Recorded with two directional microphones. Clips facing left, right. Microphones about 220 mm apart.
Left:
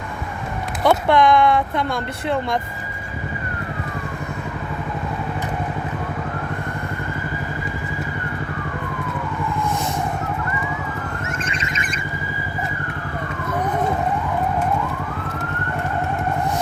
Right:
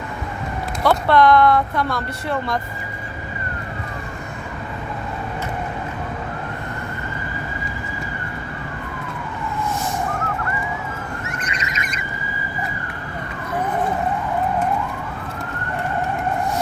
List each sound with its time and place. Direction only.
0.9 s speech: 15° left (ahead or behind)